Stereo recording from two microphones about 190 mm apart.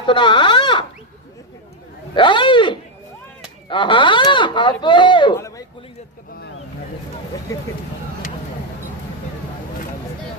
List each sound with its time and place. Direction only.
0.0 s speech: 25° left (ahead or behind)
2.1 s speech: 25° left (ahead or behind)
7.5 s speech: 15° left (ahead or behind)